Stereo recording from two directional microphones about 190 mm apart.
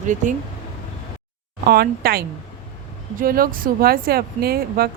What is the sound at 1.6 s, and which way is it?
A woman's voice, 55° right (ahead or behind).